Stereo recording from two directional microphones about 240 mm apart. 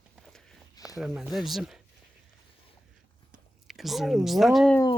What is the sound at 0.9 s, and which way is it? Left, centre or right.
Speech, centre.